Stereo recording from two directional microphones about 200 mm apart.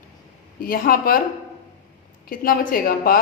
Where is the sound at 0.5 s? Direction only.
45° left (ahead or behind).